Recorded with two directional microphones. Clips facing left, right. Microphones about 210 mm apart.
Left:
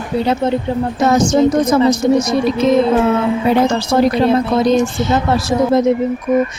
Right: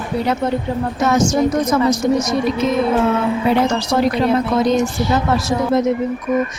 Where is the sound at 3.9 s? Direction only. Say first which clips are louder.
Left 3 dB; 30° left (ahead or behind).